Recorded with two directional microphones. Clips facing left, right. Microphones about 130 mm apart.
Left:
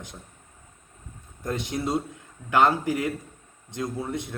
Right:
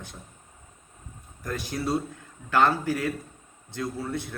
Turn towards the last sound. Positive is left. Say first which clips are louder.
# left 1 dB
turn(degrees=20)  # may be behind; listen again after turning